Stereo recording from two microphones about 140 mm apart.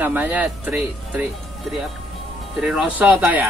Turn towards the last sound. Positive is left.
turn(degrees=-10)  # may be behind; listen again after turning